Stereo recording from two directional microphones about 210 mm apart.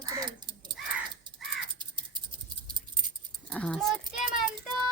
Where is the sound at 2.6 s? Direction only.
20° right (ahead or behind).